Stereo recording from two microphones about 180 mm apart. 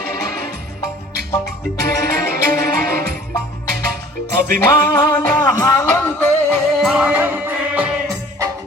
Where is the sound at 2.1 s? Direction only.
60° right (ahead or behind).